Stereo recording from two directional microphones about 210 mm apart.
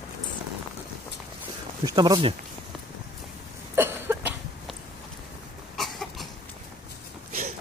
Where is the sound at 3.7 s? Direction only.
10° right (ahead or behind).